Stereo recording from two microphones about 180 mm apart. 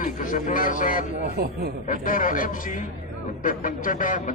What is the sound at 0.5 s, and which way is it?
Speech, 50° left (ahead or behind).